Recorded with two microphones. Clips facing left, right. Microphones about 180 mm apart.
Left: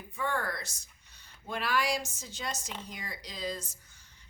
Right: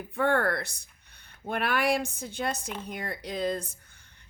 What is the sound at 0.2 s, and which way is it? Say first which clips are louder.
Speech: right 8 dB; 60° right (ahead or behind).